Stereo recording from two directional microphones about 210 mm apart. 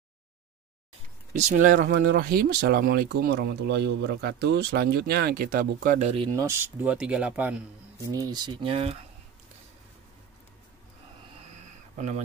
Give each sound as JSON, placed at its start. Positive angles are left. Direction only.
{"t": 1.3, "sound": "speech", "side_deg": -40}